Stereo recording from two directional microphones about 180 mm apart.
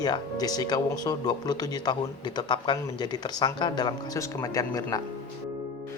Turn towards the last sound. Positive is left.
turn(degrees=20)  # may be behind; listen again after turning